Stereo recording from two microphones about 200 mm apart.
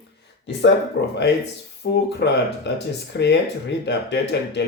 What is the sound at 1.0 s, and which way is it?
Speech, 55° left (ahead or behind).